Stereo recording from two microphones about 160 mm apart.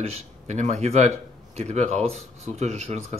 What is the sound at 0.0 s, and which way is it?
Speech, 45° right (ahead or behind).